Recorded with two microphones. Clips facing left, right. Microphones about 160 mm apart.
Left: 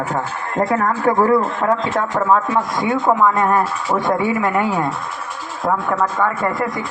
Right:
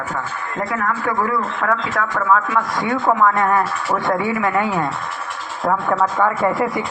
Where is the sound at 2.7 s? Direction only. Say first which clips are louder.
Left 1 dB; 15° left (ahead or behind).